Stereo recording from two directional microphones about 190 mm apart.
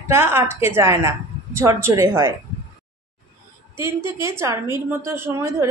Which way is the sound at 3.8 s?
15° right (ahead or behind).